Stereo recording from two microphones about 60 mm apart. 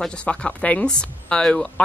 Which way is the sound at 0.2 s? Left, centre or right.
Centre.